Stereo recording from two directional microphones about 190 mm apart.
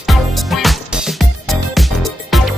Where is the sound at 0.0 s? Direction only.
Centre (ahead or behind).